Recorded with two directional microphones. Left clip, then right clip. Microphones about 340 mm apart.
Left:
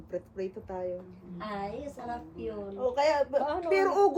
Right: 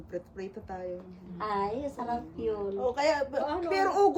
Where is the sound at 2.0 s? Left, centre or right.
Centre.